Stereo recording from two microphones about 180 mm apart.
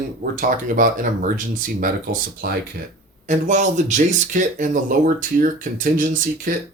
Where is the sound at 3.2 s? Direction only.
40° right (ahead or behind).